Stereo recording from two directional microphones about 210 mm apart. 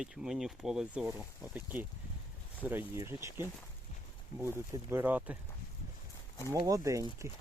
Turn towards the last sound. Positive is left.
turn(degrees=-15)  # may be behind; listen again after turning